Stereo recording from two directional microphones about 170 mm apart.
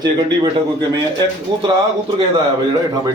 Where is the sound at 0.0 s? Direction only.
25° right (ahead or behind).